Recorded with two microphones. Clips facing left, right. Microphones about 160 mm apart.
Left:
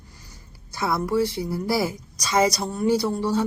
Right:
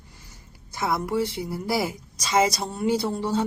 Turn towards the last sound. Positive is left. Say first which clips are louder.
# left 2 dB
turn(degrees=-25)  # may be behind; listen again after turning